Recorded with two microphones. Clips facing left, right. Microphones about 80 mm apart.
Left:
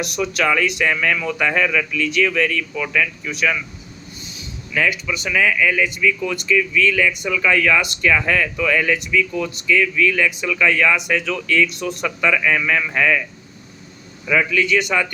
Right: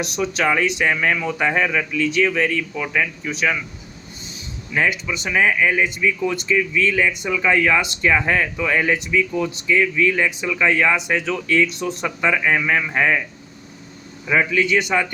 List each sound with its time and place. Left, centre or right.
0.0 s speech: right
4.7 s speech: right
14.3 s speech: right